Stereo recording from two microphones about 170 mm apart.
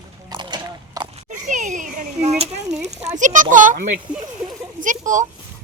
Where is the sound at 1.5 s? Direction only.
45° right (ahead or behind).